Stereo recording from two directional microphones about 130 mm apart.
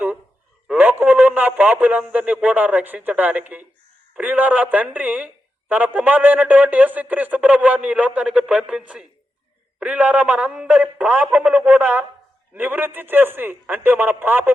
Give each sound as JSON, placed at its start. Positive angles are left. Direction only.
{"t": 0.7, "sound": "speech", "side_deg": -15}